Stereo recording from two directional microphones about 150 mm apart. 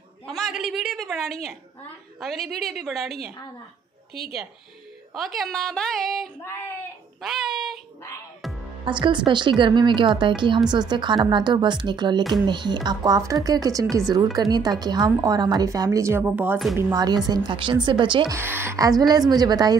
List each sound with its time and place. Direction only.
0.3 s a woman's voice: centre (ahead or behind)
4.1 s speech: 40° left (ahead or behind)
5.1 s a woman's voice: centre (ahead or behind)
8.8 s a woman's voice: 35° right (ahead or behind); by 16.5 s 10° right (ahead or behind)
16.7 s a woman's voice: 25° right (ahead or behind)
18.3 s a woman's voice: 15° right (ahead or behind)